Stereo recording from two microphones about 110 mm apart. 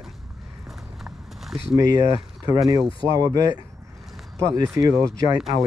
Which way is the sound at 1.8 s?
35° right (ahead or behind).